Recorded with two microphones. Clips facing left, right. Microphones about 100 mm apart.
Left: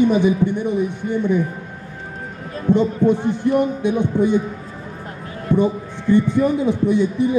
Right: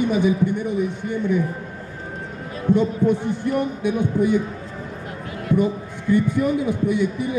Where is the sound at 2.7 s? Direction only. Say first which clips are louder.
Left 3 dB; 25° left (ahead or behind).